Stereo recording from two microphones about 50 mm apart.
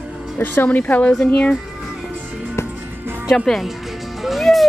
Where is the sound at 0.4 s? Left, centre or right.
Left.